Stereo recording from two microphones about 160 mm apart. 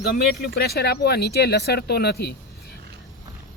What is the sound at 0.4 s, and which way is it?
Speech, 85° left.